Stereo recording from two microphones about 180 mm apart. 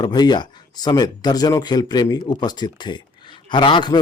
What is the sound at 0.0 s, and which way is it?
Speech, 25° left (ahead or behind).